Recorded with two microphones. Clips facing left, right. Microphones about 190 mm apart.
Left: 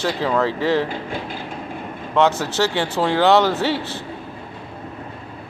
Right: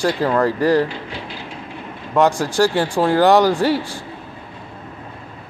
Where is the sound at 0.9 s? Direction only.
50° left (ahead or behind).